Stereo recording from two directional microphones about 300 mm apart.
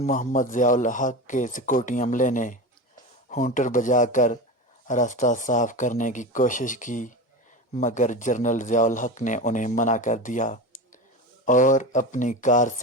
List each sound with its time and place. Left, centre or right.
0.0 s a man's voice: left